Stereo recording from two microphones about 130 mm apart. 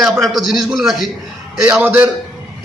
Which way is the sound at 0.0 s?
Centre (ahead or behind).